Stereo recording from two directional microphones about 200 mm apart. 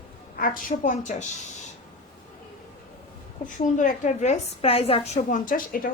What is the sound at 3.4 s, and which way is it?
A woman's voice, 40° left (ahead or behind).